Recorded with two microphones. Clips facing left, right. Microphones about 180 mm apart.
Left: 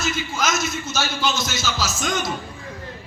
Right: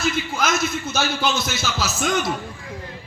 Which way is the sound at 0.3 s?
60° right (ahead or behind).